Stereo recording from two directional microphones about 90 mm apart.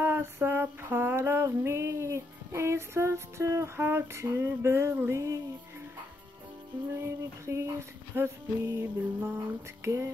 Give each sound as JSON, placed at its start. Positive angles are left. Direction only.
{"t": 0.0, "sound": "female singing", "side_deg": -25}
{"t": 7.0, "sound": "female singing", "side_deg": -30}
{"t": 8.2, "sound": "music", "side_deg": -30}
{"t": 9.8, "sound": "female singing", "side_deg": -30}